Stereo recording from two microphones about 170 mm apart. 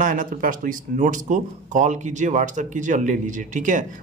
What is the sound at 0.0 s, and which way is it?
Speech, 50° right (ahead or behind).